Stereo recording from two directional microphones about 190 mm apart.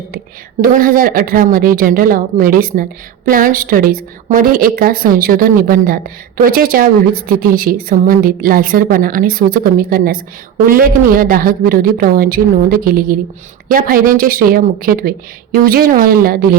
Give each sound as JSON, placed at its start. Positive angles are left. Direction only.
{"t": 0.6, "sound": "a woman's voice", "side_deg": -50}